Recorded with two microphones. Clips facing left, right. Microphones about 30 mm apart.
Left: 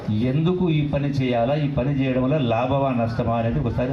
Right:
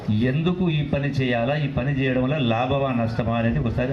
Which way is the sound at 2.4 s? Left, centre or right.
Right.